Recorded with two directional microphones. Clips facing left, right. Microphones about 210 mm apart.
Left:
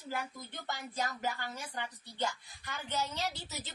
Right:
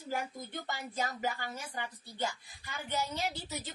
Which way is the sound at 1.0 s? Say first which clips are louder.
Right 1 dB; 50° right (ahead or behind).